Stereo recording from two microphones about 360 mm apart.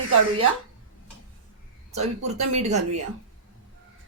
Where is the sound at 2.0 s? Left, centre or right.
Centre.